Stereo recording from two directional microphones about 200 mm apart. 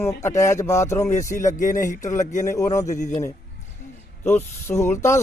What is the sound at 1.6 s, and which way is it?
Speech, 40° left (ahead or behind).